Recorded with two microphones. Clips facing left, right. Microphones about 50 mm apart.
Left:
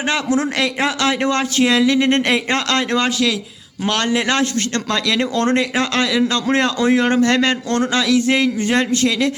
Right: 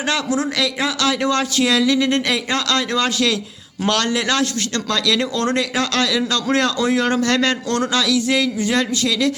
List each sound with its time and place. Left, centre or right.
0.1 s a man's voice: left